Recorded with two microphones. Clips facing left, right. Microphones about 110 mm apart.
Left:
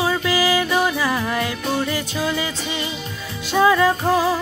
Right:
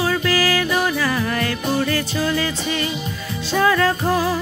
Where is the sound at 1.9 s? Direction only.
15° left (ahead or behind).